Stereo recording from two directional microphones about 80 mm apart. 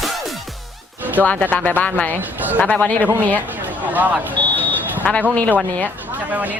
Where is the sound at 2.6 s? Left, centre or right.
Centre.